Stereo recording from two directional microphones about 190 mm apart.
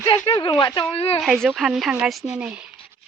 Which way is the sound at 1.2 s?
Centre (ahead or behind).